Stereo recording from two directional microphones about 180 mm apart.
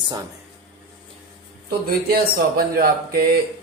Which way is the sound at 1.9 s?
55° right (ahead or behind).